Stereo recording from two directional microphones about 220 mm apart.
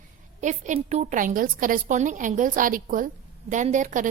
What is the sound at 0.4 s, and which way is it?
A woman's voice, 35° right (ahead or behind).